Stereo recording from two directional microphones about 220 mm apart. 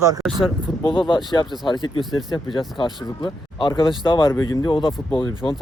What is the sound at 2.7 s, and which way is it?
Speech, 20° left (ahead or behind).